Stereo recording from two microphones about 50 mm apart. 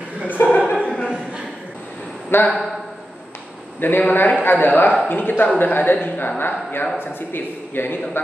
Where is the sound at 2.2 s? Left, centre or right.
Left.